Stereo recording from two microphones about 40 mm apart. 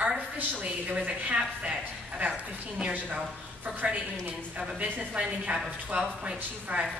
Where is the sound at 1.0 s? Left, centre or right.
Right.